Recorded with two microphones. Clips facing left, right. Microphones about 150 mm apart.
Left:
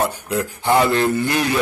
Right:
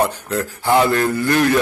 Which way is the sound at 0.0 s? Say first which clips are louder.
Right 1 dB; 10° left (ahead or behind).